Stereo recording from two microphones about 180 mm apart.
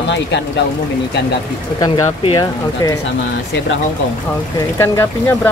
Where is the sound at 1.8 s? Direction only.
20° left (ahead or behind).